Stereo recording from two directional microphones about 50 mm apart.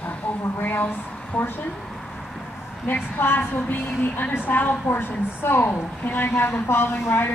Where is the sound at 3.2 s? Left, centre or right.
Left.